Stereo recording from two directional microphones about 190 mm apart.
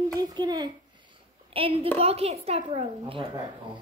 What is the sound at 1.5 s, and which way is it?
A woman's voice, 30° right (ahead or behind).